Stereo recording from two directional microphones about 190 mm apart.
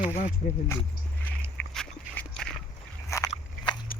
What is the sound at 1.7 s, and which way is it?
Dog, 5° left (ahead or behind).